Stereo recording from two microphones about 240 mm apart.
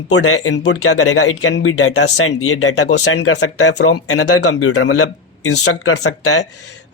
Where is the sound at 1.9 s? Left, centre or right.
Left.